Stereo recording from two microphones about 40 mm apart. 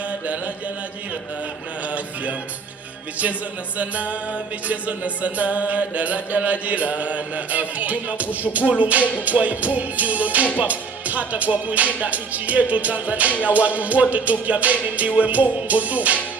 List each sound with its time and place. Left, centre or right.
0.1 s mantra: right
3.8 s music: right